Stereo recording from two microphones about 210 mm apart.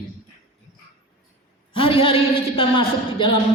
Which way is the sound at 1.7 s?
25° left (ahead or behind).